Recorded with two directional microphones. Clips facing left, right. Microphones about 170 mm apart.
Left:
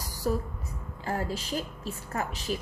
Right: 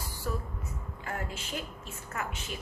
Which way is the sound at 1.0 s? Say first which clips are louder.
Left 7 dB; 35° left (ahead or behind).